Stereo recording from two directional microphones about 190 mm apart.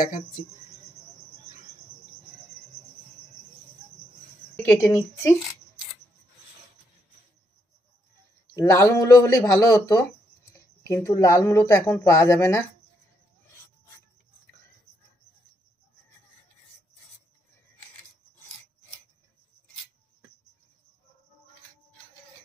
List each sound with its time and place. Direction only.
4.6 s speech: 10° left (ahead or behind)
8.5 s speech: 15° left (ahead or behind)